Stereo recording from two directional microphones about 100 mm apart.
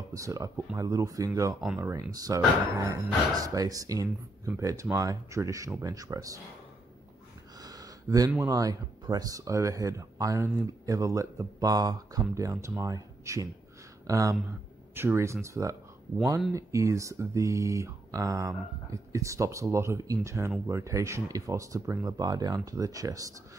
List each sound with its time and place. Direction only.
0.1 s speech: 35° right (ahead or behind)
7.6 s a sound: 40° right (ahead or behind)
8.4 s speech: 35° right (ahead or behind)